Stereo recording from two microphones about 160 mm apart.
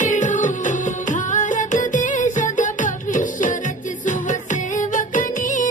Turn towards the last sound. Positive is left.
turn(degrees=55)  # may be behind; listen again after turning